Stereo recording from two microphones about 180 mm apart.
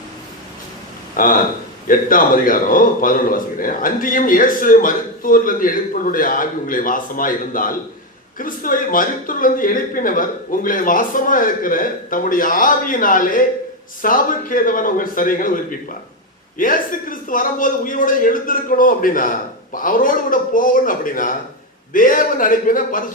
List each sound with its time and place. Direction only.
1.1 s a man's voice: 50° left (ahead or behind)